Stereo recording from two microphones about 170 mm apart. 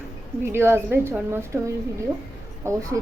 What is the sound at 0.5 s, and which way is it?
A woman's voice, 15° right (ahead or behind).